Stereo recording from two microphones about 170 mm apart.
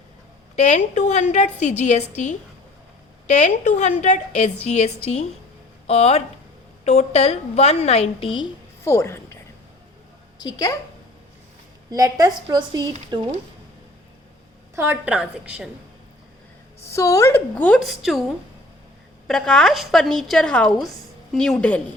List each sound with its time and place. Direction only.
0.5 s a woman's voice: 40° left (ahead or behind)
8.8 s a woman's voice: 15° left (ahead or behind)
10.4 s a woman's voice: 20° left (ahead or behind)
11.9 s a woman's voice: 20° right (ahead or behind)
14.8 s a woman's voice: 10° right (ahead or behind)
16.9 s a woman's voice: 20° left (ahead or behind)
17.7 s a woman's voice: centre (ahead or behind)
19.3 s a woman's voice: 5° left (ahead or behind)